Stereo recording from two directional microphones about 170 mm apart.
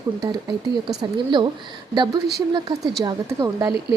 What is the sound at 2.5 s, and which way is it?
Speech, 25° right (ahead or behind).